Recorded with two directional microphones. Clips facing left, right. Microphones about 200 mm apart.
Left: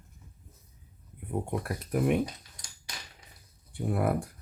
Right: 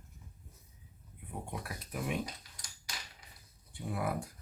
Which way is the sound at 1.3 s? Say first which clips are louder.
Left 10 dB; 55° left (ahead or behind).